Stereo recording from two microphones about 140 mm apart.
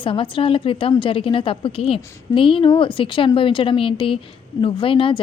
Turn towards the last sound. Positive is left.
turn(degrees=40)  # may be behind; listen again after turning